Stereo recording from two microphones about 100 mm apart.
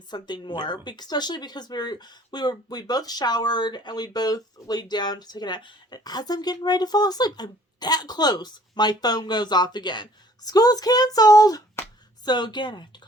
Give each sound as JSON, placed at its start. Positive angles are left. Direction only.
{"t": 0.1, "sound": "speech", "side_deg": 50}